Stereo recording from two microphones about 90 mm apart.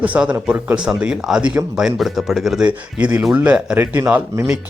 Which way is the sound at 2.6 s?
15° right (ahead or behind).